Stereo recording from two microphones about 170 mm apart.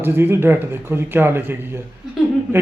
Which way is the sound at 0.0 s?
15° right (ahead or behind).